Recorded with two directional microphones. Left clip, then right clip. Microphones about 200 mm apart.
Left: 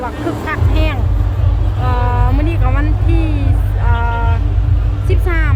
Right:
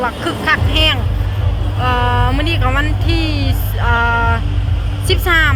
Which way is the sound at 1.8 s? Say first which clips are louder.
Right 4 dB; centre (ahead or behind).